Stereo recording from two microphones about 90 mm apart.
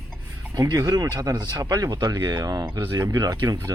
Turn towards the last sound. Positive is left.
turn(degrees=-40)  # may be behind; listen again after turning